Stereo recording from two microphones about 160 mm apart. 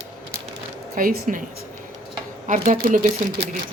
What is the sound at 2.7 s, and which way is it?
Speech, 55° right (ahead or behind).